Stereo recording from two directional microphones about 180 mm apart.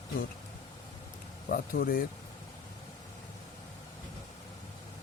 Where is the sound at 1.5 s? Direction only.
55° left (ahead or behind).